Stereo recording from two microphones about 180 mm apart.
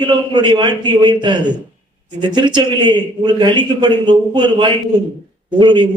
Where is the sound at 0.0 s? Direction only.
25° right (ahead or behind).